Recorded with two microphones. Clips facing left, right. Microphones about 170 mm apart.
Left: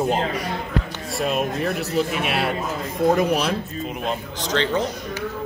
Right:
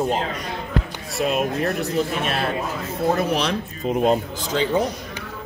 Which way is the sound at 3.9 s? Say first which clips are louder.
Right 10 dB; 40° right (ahead or behind).